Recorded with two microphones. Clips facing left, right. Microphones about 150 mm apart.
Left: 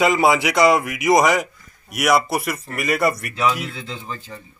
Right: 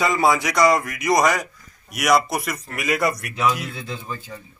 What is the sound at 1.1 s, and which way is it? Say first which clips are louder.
Speech: left 2 dB; 20° left (ahead or behind).